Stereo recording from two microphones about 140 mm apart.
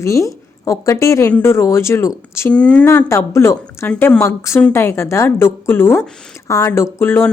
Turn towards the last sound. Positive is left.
turn(degrees=15)  # may be behind; listen again after turning